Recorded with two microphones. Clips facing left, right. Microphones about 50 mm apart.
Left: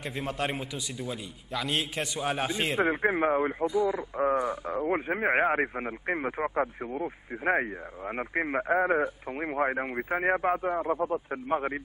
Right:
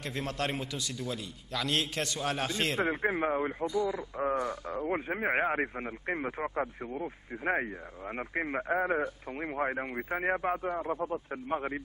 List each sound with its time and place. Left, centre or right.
0.1 s a man's voice: centre